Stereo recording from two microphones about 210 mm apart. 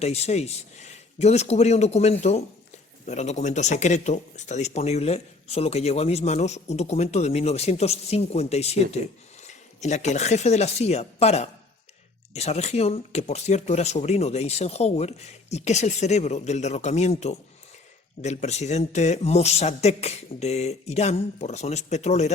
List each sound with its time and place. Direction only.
0.0 s speech: 30° left (ahead or behind)